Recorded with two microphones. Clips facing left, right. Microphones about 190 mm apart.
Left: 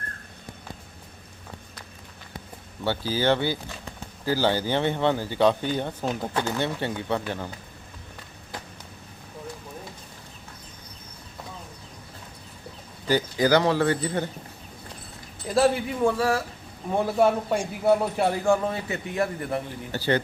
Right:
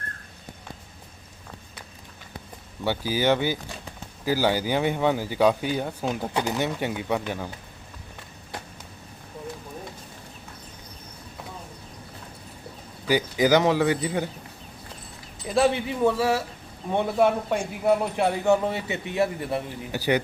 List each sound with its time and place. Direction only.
2.8 s speech: 15° right (ahead or behind)
13.1 s speech: 15° right (ahead or behind)
15.4 s a man's voice: centre (ahead or behind)